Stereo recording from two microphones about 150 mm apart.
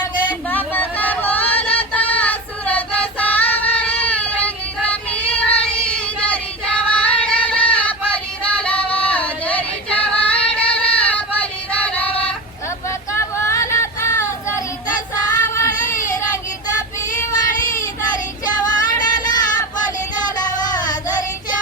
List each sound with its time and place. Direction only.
0.4 s a sound: 10° left (ahead or behind)
1.8 s female singing: 10° left (ahead or behind)
4.0 s child singing: 10° left (ahead or behind)
5.5 s female singing: 10° left (ahead or behind)
11.7 s music: 10° left (ahead or behind)
12.9 s a sound: 20° left (ahead or behind)
15.1 s child singing: 20° left (ahead or behind)
18.5 s music: 25° left (ahead or behind)
20.2 s a sound: 25° left (ahead or behind)